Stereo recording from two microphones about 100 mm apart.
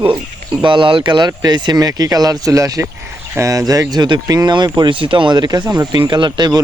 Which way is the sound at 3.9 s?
45° right (ahead or behind).